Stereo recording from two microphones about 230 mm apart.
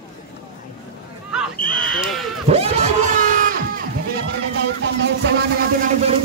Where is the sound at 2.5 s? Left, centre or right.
Right.